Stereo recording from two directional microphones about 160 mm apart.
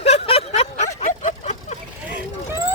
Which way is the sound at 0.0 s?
40° left (ahead or behind).